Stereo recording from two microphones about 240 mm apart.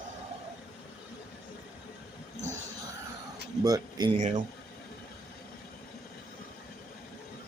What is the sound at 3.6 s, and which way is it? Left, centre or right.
Speech, centre.